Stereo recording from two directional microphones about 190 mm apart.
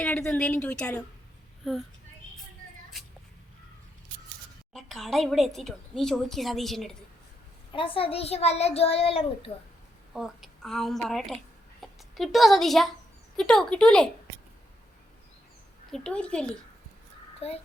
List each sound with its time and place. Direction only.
0.0 s speech: 10° left (ahead or behind)
4.7 s speech: centre (ahead or behind)
7.7 s a child's voice: 30° left (ahead or behind)
10.2 s a woman's voice: centre (ahead or behind)
15.9 s speech: 5° left (ahead or behind)
17.4 s a child's voice: 30° left (ahead or behind)